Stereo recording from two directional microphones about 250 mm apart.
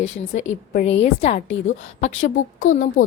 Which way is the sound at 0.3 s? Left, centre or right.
Left.